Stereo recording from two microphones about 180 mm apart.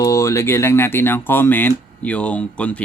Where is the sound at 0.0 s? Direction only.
20° left (ahead or behind).